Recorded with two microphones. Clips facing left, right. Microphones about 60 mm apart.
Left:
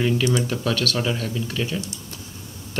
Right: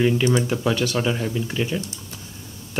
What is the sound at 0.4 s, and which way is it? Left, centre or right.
Speech, centre.